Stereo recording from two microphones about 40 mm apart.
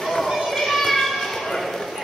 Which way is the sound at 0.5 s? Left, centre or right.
Centre.